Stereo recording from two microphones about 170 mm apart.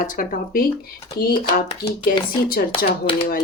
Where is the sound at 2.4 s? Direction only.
60° left (ahead or behind).